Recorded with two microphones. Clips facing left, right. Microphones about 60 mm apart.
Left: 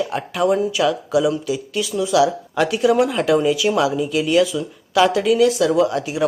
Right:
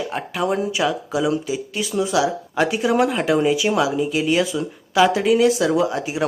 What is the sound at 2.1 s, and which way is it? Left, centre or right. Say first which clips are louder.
Speech: left 7 dB; centre.